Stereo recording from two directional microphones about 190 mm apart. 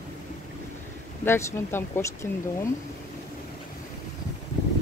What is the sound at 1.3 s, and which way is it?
Speech, 15° left (ahead or behind).